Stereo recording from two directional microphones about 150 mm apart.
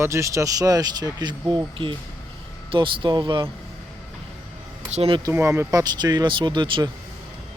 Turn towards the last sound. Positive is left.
turn(degrees=-30)  # may be behind; listen again after turning